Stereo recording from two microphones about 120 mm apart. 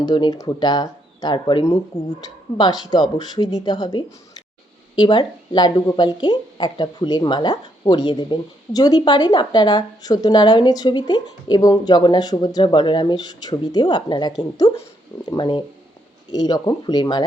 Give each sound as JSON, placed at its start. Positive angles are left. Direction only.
{"t": 0.0, "sound": "speech", "side_deg": 35}